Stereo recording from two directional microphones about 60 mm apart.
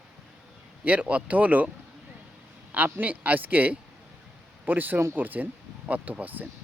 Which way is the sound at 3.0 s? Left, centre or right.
Right.